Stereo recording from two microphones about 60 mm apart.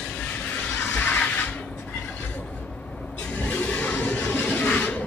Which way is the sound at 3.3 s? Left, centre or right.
Left.